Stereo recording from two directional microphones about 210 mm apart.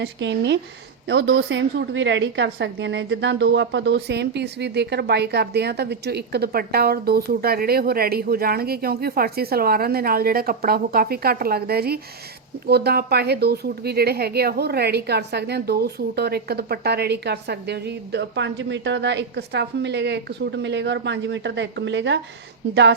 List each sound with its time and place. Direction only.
0.0 s a woman's voice: 60° right (ahead or behind)